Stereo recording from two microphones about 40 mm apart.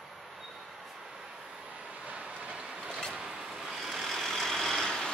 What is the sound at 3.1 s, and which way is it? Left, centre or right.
Vehicle, centre.